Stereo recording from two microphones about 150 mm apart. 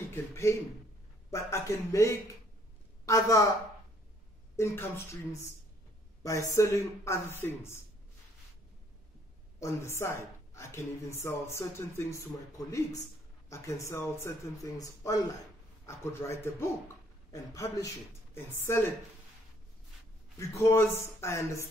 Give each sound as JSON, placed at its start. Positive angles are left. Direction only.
{"t": 0.1, "sound": "a woman's voice", "side_deg": 20}
{"t": 4.6, "sound": "a woman's voice", "side_deg": 15}
{"t": 9.6, "sound": "a woman's voice", "side_deg": 20}
{"t": 20.3, "sound": "speech", "side_deg": 20}